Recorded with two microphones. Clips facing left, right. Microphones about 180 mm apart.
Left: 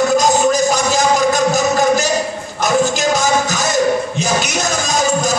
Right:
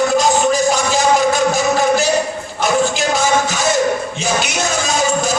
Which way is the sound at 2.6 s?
40° left (ahead or behind).